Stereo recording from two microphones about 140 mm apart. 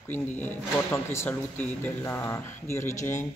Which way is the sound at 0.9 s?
20° left (ahead or behind).